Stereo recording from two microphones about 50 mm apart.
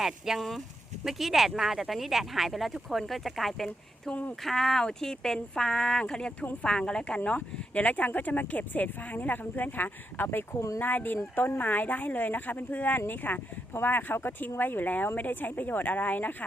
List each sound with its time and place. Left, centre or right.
0.0 s speech: centre
4.1 s speech: left
4.4 s speech: centre
6.4 s speech: left
6.7 s speech: centre; by 10.4 s left
10.5 s speech: left
10.8 s speech: left